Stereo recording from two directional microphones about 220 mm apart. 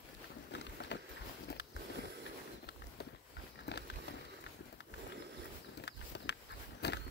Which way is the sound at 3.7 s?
50° left (ahead or behind).